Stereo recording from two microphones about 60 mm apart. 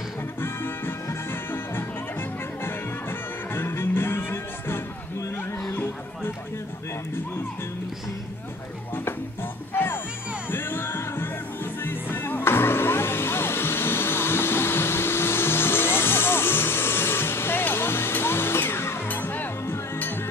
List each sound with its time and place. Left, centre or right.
0.4 s music: left
5.7 s chatter: left
8.9 s music: left